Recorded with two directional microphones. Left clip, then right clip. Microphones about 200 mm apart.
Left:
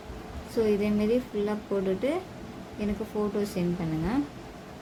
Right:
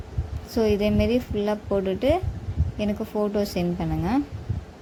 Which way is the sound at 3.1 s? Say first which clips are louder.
Right 5 dB; 30° right (ahead or behind).